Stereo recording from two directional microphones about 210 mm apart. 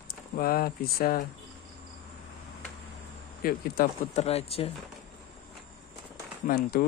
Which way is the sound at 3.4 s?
45° left (ahead or behind).